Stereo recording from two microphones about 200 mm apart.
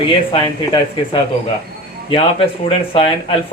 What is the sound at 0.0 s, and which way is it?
Speech, 25° left (ahead or behind).